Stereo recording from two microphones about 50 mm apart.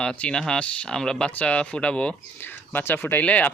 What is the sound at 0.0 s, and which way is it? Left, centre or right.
Speech, centre.